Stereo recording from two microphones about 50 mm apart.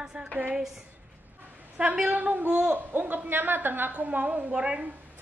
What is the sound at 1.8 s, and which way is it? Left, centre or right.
Speech, right.